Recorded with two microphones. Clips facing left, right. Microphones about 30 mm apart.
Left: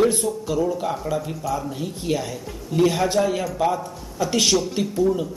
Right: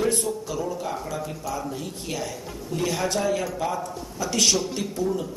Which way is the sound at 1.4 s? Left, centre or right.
Centre.